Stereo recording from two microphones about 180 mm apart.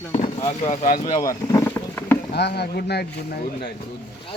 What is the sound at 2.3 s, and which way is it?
Speech, 65° left (ahead or behind).